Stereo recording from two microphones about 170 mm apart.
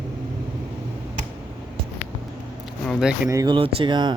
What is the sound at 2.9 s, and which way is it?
Speech, 5° right (ahead or behind).